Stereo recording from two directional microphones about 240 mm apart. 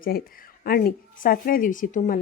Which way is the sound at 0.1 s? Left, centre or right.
Left.